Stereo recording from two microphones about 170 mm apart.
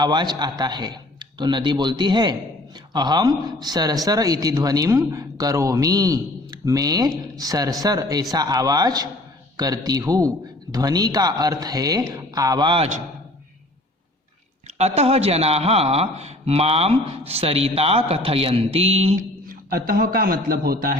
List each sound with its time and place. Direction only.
0.0 s a man's voice: 25° right (ahead or behind)
14.7 s speech: 40° right (ahead or behind)
19.5 s a man's voice: 60° right (ahead or behind)